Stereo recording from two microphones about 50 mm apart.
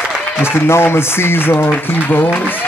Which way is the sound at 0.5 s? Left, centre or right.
Left.